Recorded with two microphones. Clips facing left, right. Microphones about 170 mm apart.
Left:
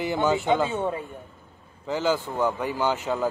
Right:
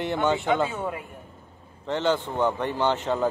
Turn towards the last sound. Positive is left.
turn(degrees=5)  # may be behind; listen again after turning